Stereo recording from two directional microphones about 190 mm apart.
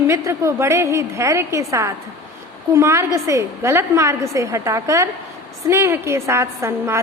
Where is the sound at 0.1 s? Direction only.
15° right (ahead or behind).